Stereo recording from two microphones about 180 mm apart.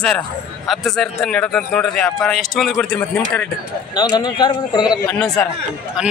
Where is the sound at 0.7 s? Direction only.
Centre (ahead or behind).